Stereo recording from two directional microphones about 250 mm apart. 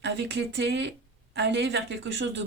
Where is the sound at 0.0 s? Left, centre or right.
Right.